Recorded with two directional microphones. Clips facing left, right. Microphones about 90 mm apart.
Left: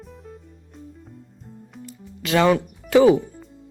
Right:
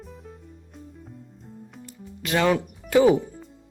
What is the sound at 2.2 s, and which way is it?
Speech, 90° left.